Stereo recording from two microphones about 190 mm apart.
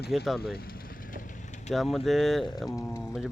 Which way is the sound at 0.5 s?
50° left (ahead or behind).